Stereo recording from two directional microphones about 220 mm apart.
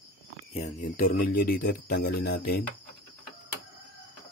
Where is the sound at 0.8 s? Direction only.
35° left (ahead or behind).